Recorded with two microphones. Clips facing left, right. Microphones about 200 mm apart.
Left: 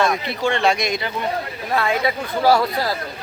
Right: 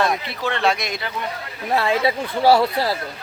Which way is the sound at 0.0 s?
Centre (ahead or behind).